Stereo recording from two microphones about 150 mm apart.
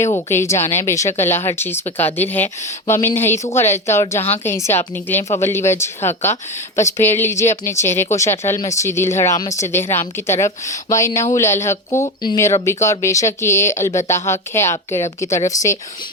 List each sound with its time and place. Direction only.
0.3 s speech: 20° left (ahead or behind)
12.0 s speech: 30° left (ahead or behind)